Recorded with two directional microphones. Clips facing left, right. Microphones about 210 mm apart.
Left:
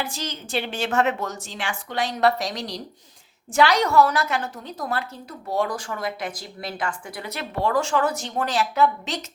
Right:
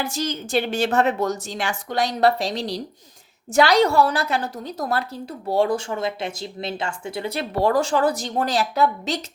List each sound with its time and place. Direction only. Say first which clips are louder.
0.0 s a woman's voice: right 5 dB; 40° right (ahead or behind)